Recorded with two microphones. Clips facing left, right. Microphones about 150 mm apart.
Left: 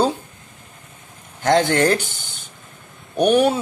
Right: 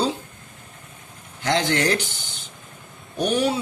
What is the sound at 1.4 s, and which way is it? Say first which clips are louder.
Speech: left 5 dB; 50° left (ahead or behind).